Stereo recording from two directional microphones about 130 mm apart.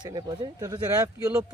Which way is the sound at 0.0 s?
35° right (ahead or behind).